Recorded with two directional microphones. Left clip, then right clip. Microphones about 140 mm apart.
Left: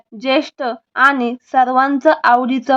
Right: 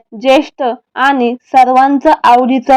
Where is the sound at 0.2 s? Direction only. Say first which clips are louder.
Right 7 dB; 15° right (ahead or behind).